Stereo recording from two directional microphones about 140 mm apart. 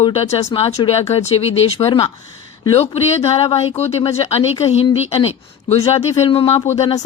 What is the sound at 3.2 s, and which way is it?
Speech, 45° left (ahead or behind).